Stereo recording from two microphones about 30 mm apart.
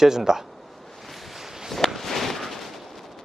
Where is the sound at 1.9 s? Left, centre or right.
Centre.